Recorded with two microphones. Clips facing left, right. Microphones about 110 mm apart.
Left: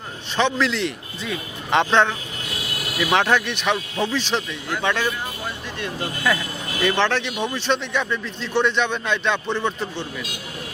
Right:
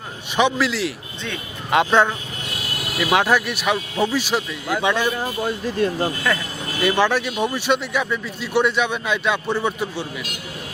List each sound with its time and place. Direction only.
0.3 s speech: 10° right (ahead or behind)
5.2 s speech: 40° right (ahead or behind)
6.8 s speech: 10° right (ahead or behind)